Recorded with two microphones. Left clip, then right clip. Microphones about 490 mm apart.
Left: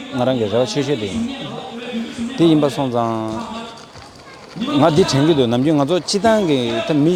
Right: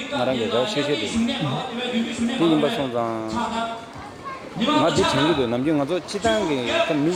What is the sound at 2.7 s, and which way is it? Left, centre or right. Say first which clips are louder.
Speech: left 5 dB; left.